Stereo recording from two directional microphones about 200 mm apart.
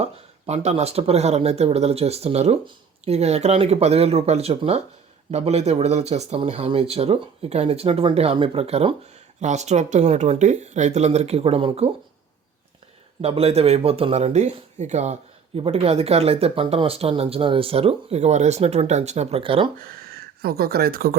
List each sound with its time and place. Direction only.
0.0 s speech: 35° right (ahead or behind)
13.2 s speech: 30° right (ahead or behind)
19.8 s speech: 50° right (ahead or behind)